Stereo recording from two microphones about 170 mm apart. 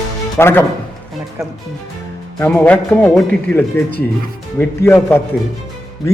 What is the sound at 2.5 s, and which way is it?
A man's voice, 10° left (ahead or behind).